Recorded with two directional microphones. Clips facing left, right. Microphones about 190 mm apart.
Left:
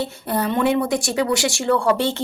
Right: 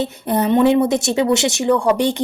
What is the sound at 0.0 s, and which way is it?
Speech, 20° right (ahead or behind).